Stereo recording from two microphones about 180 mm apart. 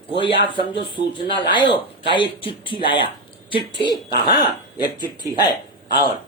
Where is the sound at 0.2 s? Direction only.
30° left (ahead or behind).